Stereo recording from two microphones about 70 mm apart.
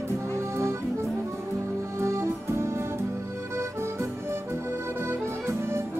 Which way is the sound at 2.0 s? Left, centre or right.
Right.